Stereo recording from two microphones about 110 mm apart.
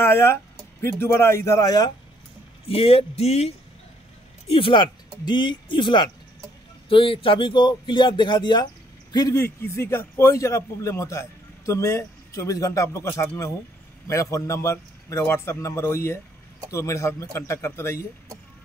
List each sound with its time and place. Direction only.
0.0 s a man's voice: 20° left (ahead or behind)
2.7 s speech: 60° left (ahead or behind)
4.5 s speech: 55° left (ahead or behind)
5.2 s speech: 45° left (ahead or behind)
9.3 s a man's voice: 25° left (ahead or behind)